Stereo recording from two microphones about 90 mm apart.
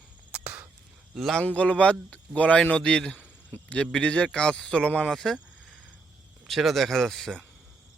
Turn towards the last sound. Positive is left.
turn(degrees=0)  # may be behind; listen again after turning